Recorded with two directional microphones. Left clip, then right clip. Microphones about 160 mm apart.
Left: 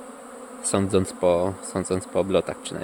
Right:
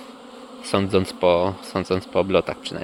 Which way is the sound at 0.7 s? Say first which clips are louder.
Right 2 dB; 25° left (ahead or behind).